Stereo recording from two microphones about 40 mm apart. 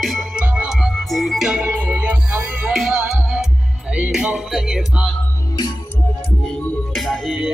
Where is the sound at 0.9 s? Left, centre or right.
Centre.